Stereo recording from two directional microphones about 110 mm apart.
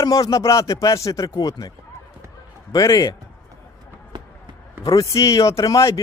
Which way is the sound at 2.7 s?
30° left (ahead or behind).